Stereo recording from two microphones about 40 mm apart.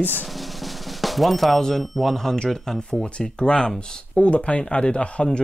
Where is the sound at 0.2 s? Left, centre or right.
Centre.